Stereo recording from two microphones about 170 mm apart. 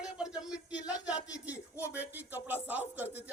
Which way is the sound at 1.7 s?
10° right (ahead or behind).